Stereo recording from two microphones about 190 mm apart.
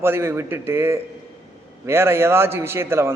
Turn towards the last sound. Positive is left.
turn(degrees=-15)  # may be behind; listen again after turning